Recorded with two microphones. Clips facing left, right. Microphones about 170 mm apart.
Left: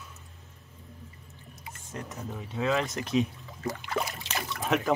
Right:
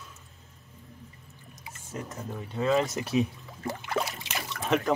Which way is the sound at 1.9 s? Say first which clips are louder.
Right 1 dB; centre (ahead or behind).